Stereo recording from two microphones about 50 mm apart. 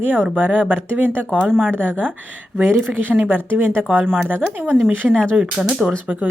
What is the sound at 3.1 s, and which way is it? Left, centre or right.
A woman's voice, right.